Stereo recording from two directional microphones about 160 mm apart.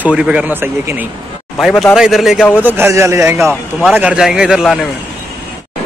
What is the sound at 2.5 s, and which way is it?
A man's voice, 10° right (ahead or behind).